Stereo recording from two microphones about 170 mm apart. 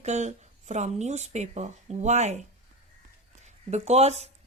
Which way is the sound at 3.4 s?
40° right (ahead or behind).